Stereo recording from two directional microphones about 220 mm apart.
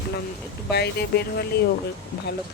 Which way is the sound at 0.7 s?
50° left (ahead or behind).